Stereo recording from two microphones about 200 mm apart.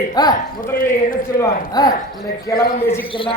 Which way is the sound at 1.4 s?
20° left (ahead or behind).